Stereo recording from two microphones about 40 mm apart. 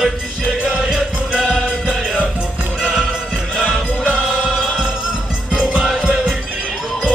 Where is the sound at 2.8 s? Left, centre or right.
Right.